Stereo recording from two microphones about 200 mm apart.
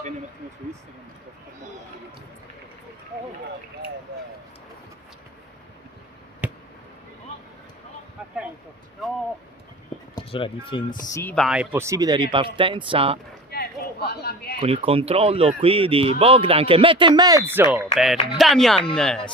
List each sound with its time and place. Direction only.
6.4 s a sound: 5° right (ahead or behind)
9.0 s speech: centre (ahead or behind)
10.2 s speech: 25° left (ahead or behind)
11.0 s speech: 15° left (ahead or behind)
11.4 s speech: 5° right (ahead or behind); by 13.1 s 25° right (ahead or behind)
13.5 s a sound: 50° left (ahead or behind)
14.6 s speech: 30° right (ahead or behind); by 19.2 s 5° left (ahead or behind)